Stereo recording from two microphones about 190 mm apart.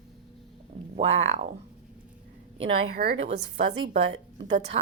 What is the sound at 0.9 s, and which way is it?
Speech, 30° right (ahead or behind).